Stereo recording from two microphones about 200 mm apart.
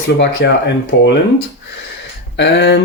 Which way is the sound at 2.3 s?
60° left (ahead or behind).